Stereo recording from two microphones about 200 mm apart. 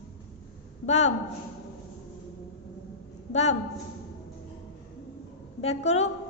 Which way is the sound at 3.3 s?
35° left (ahead or behind).